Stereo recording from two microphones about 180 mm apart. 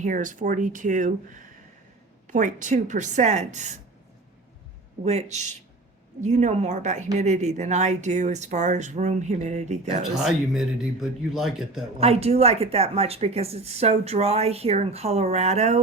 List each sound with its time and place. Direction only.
0.0 s a woman's voice: 45° right (ahead or behind)
5.0 s a woman's voice: 40° right (ahead or behind)
10.2 s speech: centre (ahead or behind)
11.9 s a woman's voice: 35° right (ahead or behind)